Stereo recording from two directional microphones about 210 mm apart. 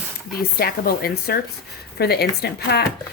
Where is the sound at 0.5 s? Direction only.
45° left (ahead or behind).